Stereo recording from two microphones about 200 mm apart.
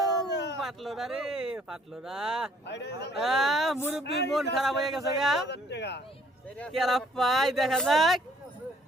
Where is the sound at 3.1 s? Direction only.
Centre (ahead or behind).